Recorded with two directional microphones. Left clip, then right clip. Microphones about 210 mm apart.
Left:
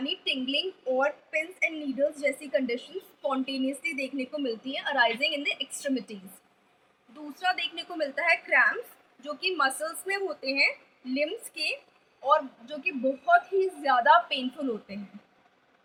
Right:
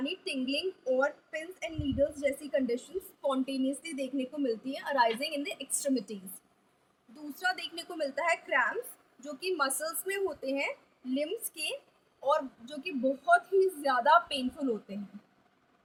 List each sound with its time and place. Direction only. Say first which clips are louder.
0.0 s a woman's voice: left 5 dB; 20° right (ahead or behind)
7.3 s a woman's voice: left 5 dB; 25° right (ahead or behind)